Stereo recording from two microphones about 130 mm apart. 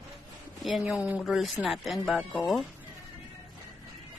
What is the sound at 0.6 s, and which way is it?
A woman's voice, centre (ahead or behind).